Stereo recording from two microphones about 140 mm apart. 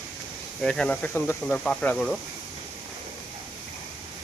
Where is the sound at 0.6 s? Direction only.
5° left (ahead or behind).